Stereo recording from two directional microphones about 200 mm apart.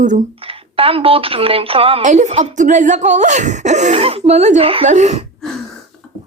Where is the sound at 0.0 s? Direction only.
35° right (ahead or behind).